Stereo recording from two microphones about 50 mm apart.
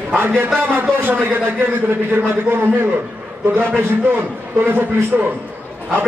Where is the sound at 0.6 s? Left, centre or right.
Right.